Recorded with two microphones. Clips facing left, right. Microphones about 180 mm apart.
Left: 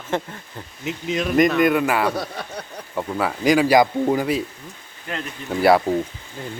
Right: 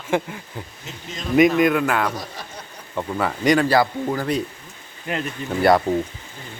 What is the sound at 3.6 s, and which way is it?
Speech, 15° left (ahead or behind).